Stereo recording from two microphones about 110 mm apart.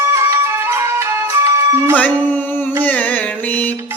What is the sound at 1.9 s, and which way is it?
Singing, 15° left (ahead or behind).